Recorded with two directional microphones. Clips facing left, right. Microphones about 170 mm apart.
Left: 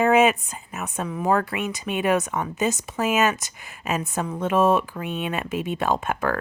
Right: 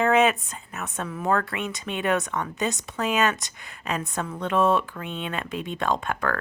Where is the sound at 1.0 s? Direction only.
10° left (ahead or behind).